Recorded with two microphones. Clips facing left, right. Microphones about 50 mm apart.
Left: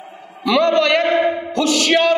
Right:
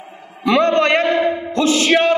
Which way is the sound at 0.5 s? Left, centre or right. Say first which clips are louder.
Right 1 dB; right.